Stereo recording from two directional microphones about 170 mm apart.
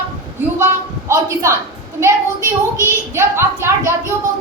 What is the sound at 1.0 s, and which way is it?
Speech, 15° right (ahead or behind).